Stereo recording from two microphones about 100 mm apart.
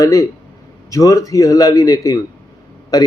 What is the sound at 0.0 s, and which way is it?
Speech, 35° left (ahead or behind).